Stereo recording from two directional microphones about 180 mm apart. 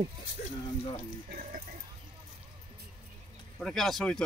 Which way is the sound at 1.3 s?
50° right (ahead or behind).